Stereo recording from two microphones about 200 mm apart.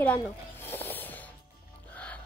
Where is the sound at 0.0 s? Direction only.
10° left (ahead or behind).